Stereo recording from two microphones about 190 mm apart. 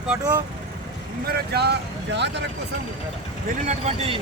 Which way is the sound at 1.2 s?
55° right (ahead or behind).